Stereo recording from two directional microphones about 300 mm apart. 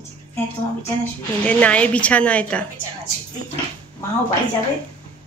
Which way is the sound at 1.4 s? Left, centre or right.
Centre.